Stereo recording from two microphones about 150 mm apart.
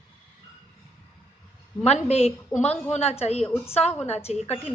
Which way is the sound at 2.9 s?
45° left (ahead or behind).